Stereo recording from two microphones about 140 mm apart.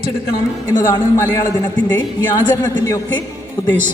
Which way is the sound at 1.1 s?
20° left (ahead or behind).